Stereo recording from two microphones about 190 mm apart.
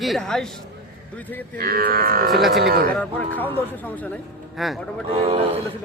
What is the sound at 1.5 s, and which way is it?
Music, 50° right (ahead or behind).